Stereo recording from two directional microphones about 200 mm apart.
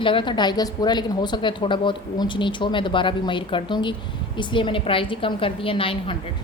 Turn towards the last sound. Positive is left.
turn(degrees=25)  # may be behind; listen again after turning